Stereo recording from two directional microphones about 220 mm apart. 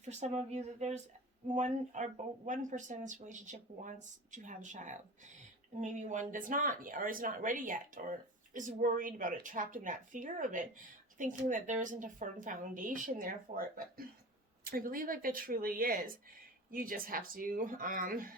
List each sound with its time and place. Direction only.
0.0 s speech: 30° right (ahead or behind)